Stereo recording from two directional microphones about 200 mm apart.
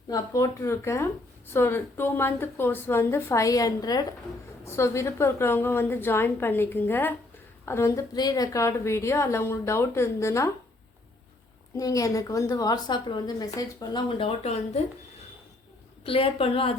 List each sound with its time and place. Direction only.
0.1 s a woman's voice: 15° left (ahead or behind)
11.8 s a woman's voice: 15° left (ahead or behind); by 14.8 s 30° left (ahead or behind)
16.0 s a woman's voice: 30° left (ahead or behind)